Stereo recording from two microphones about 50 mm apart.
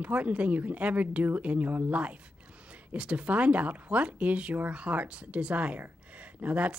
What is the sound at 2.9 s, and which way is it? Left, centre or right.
Speech, right.